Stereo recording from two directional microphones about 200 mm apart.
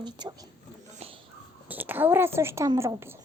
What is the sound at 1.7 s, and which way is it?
Speech, 10° right (ahead or behind).